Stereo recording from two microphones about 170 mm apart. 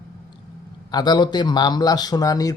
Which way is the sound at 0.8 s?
25° left (ahead or behind).